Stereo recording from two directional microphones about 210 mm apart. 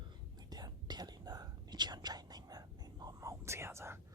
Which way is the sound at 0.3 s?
20° right (ahead or behind).